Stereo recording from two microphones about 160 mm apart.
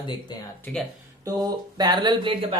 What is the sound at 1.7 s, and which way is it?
Speech, 25° right (ahead or behind).